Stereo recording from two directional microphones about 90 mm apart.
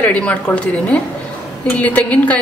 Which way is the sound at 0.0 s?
15° left (ahead or behind).